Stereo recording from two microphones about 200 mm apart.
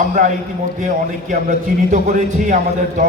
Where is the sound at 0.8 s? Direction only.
40° right (ahead or behind).